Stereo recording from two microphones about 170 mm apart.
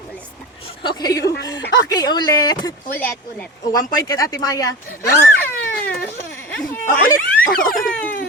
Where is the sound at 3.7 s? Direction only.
20° left (ahead or behind).